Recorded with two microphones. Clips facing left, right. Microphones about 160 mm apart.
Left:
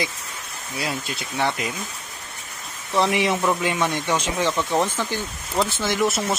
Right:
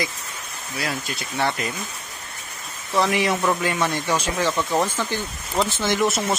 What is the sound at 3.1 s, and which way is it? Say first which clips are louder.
Speech: even; 25° left (ahead or behind).